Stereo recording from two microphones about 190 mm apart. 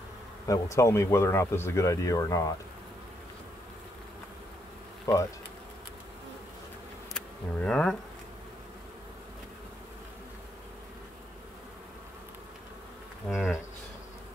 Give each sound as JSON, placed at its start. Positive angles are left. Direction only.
{"t": 0.5, "sound": "speech", "side_deg": 15}
{"t": 5.1, "sound": "speech", "side_deg": 15}
{"t": 7.2, "sound": "speech", "side_deg": 5}
{"t": 13.2, "sound": "insect", "side_deg": 5}